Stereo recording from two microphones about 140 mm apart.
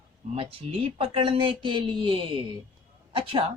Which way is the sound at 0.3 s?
40° right (ahead or behind).